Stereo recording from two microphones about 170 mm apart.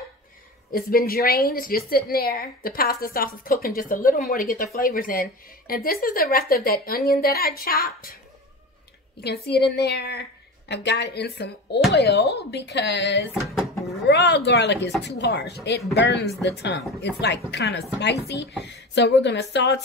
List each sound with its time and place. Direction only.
0.7 s a woman's voice: 60° left (ahead or behind)
9.2 s a woman's voice: 70° left (ahead or behind)
11.9 s speech: 75° left (ahead or behind)
18.6 s speech: 90° left